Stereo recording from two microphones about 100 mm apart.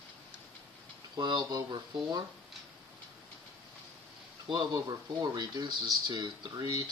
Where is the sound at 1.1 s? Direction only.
45° right (ahead or behind).